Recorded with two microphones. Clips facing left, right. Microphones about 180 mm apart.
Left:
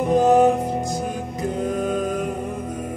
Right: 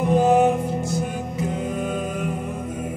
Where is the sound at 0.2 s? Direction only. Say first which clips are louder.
Left 2 dB; 5° right (ahead or behind).